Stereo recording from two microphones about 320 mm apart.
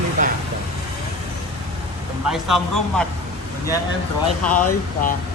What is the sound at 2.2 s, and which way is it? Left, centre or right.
Speech, centre.